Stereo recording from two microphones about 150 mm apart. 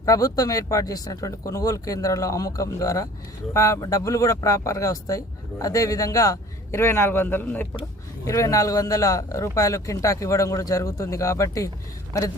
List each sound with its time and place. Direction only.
0.0 s speech: 25° left (ahead or behind)